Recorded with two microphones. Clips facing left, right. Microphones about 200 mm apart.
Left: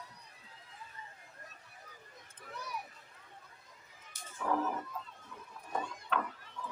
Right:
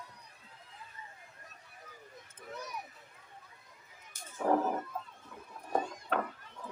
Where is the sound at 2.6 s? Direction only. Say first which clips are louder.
Left 1 dB; 20° right (ahead or behind).